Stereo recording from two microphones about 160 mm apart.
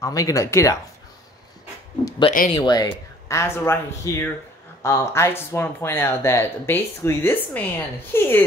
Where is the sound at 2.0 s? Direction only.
30° left (ahead or behind).